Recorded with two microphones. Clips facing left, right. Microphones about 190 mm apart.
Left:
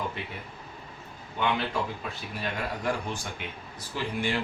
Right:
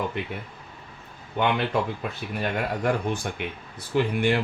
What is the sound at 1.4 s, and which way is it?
Speech, 60° right (ahead or behind).